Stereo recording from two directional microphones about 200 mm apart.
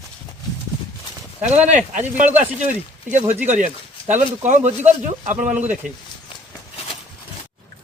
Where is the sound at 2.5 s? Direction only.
40° right (ahead or behind).